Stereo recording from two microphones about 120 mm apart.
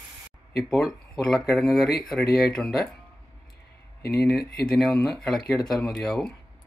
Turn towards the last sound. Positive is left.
turn(degrees=0)  # may be behind; listen again after turning